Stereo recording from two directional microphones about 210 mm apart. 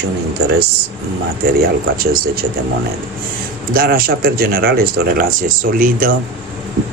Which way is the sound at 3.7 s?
45° right (ahead or behind).